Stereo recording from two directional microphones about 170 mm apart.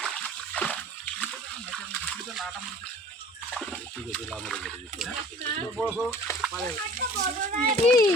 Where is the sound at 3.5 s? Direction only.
5° left (ahead or behind).